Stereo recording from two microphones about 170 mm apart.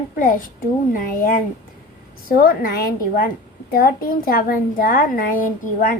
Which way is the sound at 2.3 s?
55° left (ahead or behind).